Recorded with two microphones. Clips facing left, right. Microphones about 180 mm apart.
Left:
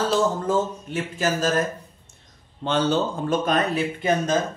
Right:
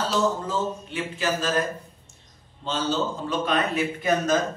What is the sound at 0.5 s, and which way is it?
A man's voice, 45° left (ahead or behind).